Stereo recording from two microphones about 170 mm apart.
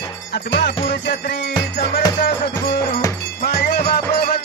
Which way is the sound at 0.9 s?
85° left.